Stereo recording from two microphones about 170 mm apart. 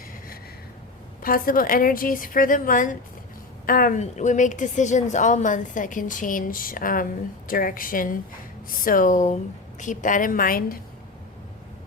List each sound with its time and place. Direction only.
1.2 s a woman's voice: 55° left (ahead or behind)